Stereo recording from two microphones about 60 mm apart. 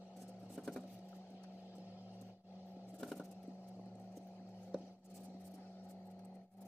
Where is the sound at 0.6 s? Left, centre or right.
Centre.